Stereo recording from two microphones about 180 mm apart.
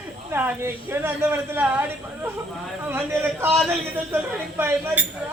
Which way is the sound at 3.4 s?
15° right (ahead or behind).